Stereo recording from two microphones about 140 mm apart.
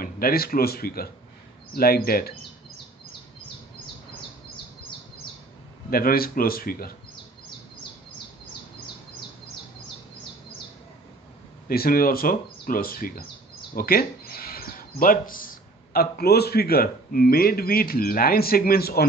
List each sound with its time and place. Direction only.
0.0 s speech: 90° left
5.9 s speech: 90° left
11.7 s speech: 90° left